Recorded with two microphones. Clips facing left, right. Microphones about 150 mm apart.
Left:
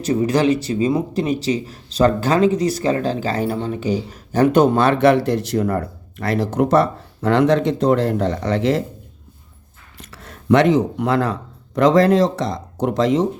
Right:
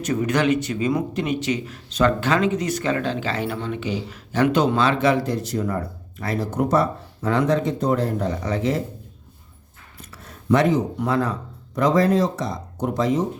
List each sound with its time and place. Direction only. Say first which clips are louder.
0.0 s speech: left 4 dB; 30° left (ahead or behind); by 8.8 s 80° left
10.0 s speech: left 3 dB; 85° left